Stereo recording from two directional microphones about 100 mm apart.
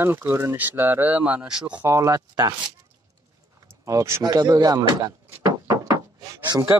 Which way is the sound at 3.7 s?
30° right (ahead or behind).